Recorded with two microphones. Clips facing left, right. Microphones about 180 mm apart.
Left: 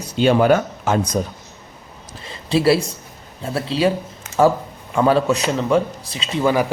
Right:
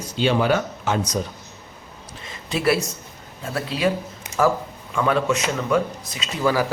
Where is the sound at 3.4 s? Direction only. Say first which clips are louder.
Left 4 dB; 30° left (ahead or behind).